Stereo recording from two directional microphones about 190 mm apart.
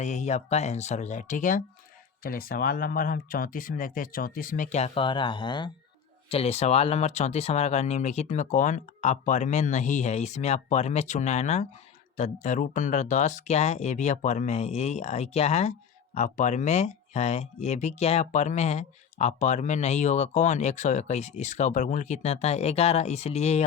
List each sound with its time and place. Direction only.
0.0 s speech: 40° left (ahead or behind)